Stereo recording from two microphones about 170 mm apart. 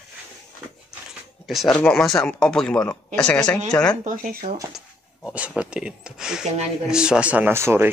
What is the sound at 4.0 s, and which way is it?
Speech, 50° right (ahead or behind).